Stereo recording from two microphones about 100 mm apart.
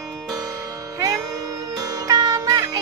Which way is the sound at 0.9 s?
35° right (ahead or behind).